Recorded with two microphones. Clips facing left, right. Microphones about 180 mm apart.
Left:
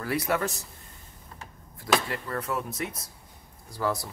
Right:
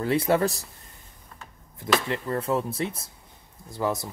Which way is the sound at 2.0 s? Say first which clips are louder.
Right 5 dB; 25° right (ahead or behind).